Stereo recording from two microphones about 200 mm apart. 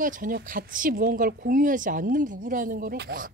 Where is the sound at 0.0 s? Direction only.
40° right (ahead or behind).